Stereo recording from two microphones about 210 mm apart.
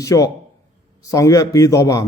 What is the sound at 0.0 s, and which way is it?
A man's voice, 15° left (ahead or behind).